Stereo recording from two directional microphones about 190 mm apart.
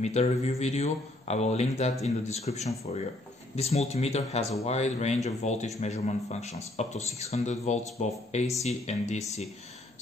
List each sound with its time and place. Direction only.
0.0 s a man's voice: 35° left (ahead or behind)